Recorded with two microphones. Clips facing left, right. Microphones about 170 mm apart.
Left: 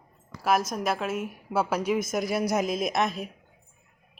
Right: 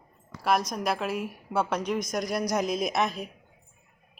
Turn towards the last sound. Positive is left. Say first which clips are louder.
# left 1 dB
turn(degrees=0)  # may be behind; listen again after turning